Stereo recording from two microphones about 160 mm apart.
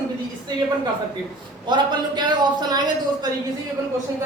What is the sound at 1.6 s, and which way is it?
A man's voice, 25° right (ahead or behind).